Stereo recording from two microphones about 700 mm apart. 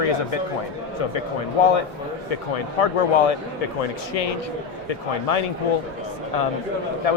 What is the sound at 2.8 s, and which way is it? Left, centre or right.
Speech, left.